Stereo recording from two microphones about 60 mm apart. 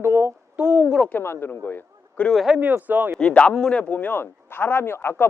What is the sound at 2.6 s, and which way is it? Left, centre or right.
Speech, right.